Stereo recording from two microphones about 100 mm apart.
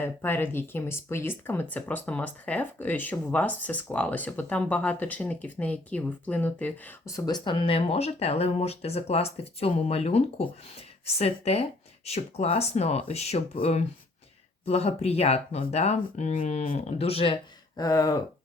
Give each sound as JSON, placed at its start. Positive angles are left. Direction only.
{"t": 0.0, "sound": "speech", "side_deg": 20}
{"t": 7.0, "sound": "speech", "side_deg": 35}
{"t": 17.7, "sound": "speech", "side_deg": 35}